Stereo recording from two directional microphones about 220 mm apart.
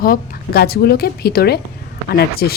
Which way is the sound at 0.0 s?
45° left (ahead or behind).